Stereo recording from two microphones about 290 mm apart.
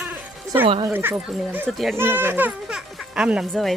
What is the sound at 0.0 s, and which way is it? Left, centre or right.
Music, centre.